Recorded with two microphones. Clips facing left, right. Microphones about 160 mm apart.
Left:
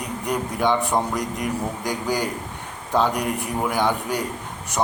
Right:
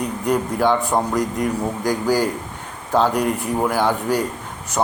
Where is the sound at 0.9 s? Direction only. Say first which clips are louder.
Right 4 dB; 5° right (ahead or behind).